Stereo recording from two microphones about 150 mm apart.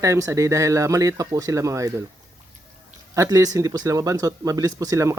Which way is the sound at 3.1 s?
20° right (ahead or behind).